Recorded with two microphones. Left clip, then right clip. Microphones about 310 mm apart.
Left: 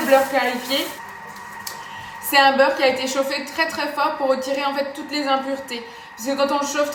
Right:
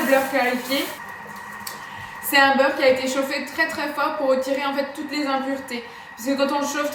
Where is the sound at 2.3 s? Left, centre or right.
Centre.